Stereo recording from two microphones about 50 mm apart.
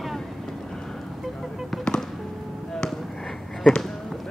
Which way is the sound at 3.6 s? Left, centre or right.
Centre.